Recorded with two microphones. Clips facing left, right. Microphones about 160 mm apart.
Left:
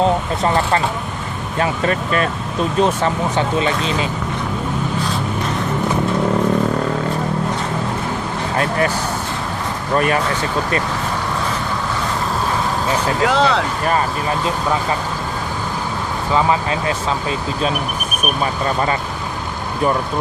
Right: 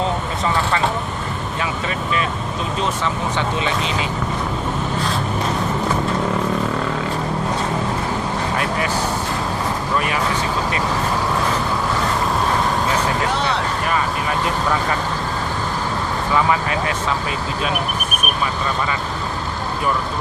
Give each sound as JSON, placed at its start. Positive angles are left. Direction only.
{"t": 1.5, "sound": "speech", "side_deg": 50}
{"t": 3.0, "sound": "speech", "side_deg": 40}
{"t": 13.2, "sound": "speech", "side_deg": 90}
{"t": 16.3, "sound": "speech", "side_deg": 25}